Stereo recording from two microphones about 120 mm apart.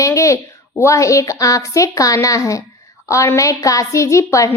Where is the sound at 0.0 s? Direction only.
25° left (ahead or behind).